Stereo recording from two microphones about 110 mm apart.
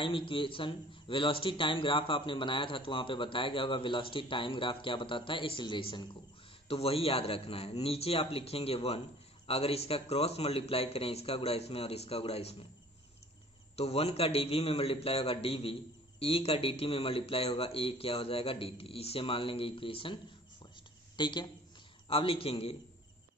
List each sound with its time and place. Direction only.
0.0 s speech: 50° left (ahead or behind)
6.7 s a man's voice: 60° left (ahead or behind)
13.7 s a man's voice: 65° left (ahead or behind)
21.2 s speech: 45° left (ahead or behind)
22.0 s a man's voice: 55° left (ahead or behind)